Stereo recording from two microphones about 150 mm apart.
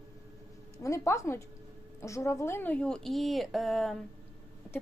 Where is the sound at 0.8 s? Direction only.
20° left (ahead or behind).